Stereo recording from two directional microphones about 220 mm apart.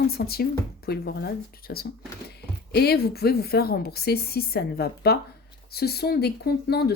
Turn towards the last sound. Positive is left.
turn(degrees=45)  # may be behind; listen again after turning